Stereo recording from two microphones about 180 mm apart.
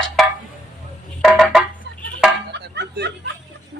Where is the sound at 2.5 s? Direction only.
70° right (ahead or behind).